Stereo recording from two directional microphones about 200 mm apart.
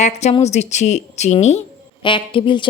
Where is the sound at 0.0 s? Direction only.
35° left (ahead or behind).